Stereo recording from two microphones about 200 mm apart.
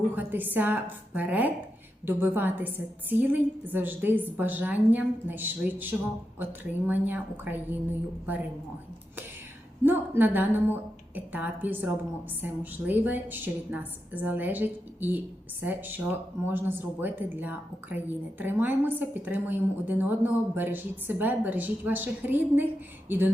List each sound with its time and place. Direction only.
0.1 s a woman's voice: 10° right (ahead or behind)
9.8 s a woman's voice: 10° right (ahead or behind)